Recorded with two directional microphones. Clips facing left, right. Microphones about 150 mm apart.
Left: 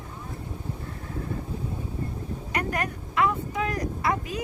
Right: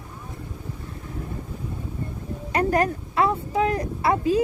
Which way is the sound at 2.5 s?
30° right (ahead or behind).